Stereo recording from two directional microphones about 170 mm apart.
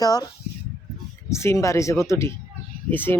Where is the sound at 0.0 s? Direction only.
20° left (ahead or behind).